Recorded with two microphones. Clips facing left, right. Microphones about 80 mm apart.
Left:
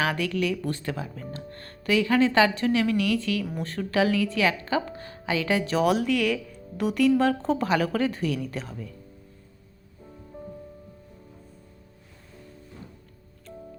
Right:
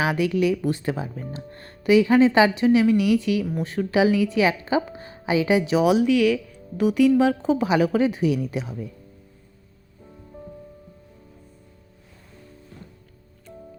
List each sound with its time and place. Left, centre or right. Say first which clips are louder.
0.0 s speech: right 5 dB; centre
13.5 s music: even; centre